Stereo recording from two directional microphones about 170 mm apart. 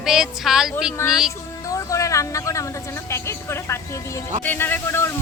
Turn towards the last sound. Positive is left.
turn(degrees=15)  # may be behind; listen again after turning